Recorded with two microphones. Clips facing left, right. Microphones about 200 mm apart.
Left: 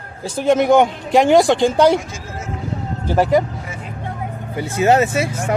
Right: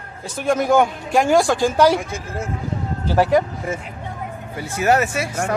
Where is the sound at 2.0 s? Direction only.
55° right (ahead or behind).